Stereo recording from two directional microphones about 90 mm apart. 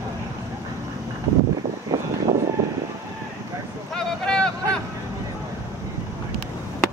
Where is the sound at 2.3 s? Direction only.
60° right (ahead or behind).